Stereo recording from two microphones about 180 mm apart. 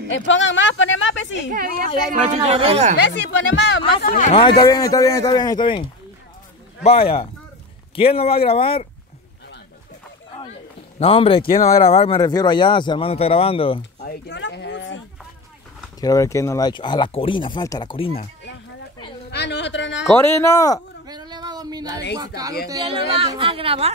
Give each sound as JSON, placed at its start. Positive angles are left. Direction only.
{"t": 0.1, "sound": "speech", "side_deg": 90}
{"t": 1.5, "sound": "speech", "side_deg": -50}
{"t": 2.2, "sound": "speech", "side_deg": -35}
{"t": 3.1, "sound": "speech", "side_deg": 80}
{"t": 4.3, "sound": "speech", "side_deg": 30}
{"t": 11.0, "sound": "speech", "side_deg": 30}
{"t": 12.2, "sound": "speech", "side_deg": 20}
{"t": 14.0, "sound": "a sound", "side_deg": 75}
{"t": 16.0, "sound": "speech", "side_deg": 20}
{"t": 19.3, "sound": "a sound", "side_deg": 75}
{"t": 20.1, "sound": "speech", "side_deg": 10}
{"t": 21.1, "sound": "a sound", "side_deg": -25}
{"t": 22.2, "sound": "speech", "side_deg": -20}